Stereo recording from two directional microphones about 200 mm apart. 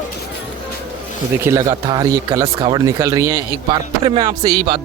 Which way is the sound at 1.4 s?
15° right (ahead or behind).